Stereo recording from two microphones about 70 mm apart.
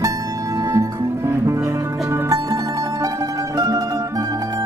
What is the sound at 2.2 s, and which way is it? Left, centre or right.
Mandolin, right.